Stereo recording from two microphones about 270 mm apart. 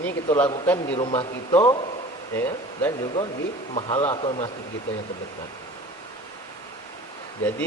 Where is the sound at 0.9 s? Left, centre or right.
Left.